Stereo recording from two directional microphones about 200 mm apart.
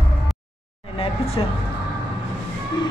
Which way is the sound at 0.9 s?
30° left (ahead or behind).